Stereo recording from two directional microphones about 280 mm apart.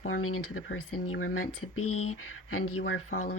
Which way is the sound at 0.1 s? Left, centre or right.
Left.